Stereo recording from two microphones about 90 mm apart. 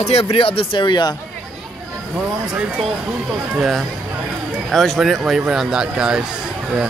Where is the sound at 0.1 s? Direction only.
90° left; by 1.1 s 55° left (ahead or behind).